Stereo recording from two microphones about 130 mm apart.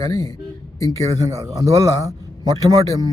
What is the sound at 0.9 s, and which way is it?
A man's voice, 25° right (ahead or behind).